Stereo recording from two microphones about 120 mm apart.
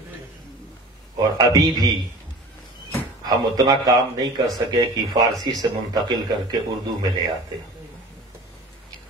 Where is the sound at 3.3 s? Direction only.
30° right (ahead or behind).